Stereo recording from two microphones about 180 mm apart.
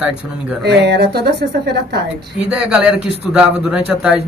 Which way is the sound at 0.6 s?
65° right (ahead or behind).